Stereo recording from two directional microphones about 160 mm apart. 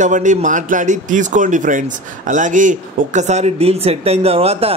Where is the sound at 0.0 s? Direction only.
50° right (ahead or behind).